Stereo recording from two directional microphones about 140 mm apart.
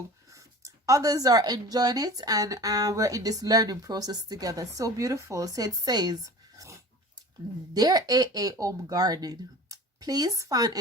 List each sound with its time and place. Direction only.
0.3 s speech: 25° right (ahead or behind)
7.8 s speech: 25° right (ahead or behind)